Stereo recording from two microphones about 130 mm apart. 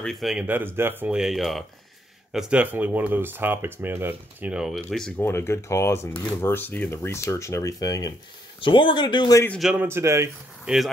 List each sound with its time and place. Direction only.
0.0 s speech: centre (ahead or behind)
0.5 s speech: 15° right (ahead or behind); by 1.6 s centre (ahead or behind)
2.3 s speech: 10° right (ahead or behind)
4.8 s speech: 5° left (ahead or behind)
5.2 s speech: 20° left (ahead or behind)
8.5 s speech: 40° left (ahead or behind)
9.6 s speech: 5° right (ahead or behind)
9.8 s speech: 20° right (ahead or behind)
10.6 s speech: 5° right (ahead or behind)